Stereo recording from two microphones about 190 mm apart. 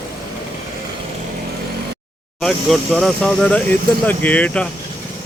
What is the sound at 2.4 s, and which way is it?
Speech, centre (ahead or behind).